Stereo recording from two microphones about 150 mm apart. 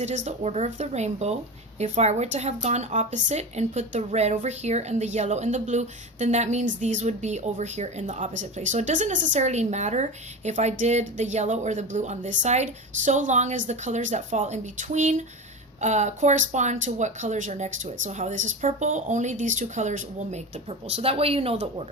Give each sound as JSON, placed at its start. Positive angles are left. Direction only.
{"t": 0.0, "sound": "speech", "side_deg": -50}